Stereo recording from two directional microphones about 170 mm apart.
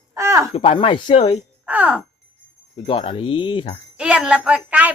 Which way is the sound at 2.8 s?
30° left (ahead or behind).